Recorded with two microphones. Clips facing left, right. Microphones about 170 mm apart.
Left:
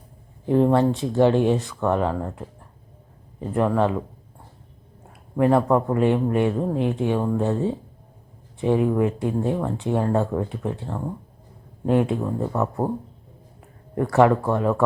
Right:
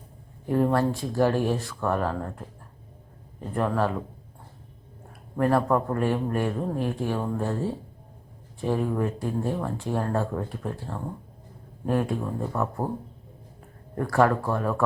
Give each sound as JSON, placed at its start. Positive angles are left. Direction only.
{"t": 0.4, "sound": "speech", "side_deg": 20}
{"t": 3.5, "sound": "speech", "side_deg": 10}
{"t": 5.4, "sound": "speech", "side_deg": 15}
{"t": 13.9, "sound": "speech", "side_deg": 15}